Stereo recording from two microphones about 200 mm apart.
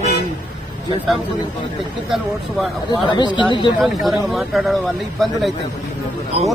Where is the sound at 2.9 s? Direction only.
25° left (ahead or behind).